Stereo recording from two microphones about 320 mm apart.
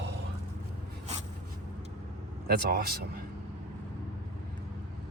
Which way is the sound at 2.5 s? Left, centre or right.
Right.